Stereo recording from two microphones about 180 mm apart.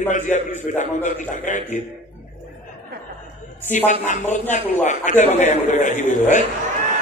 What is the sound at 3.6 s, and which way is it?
A man's voice, 40° left (ahead or behind).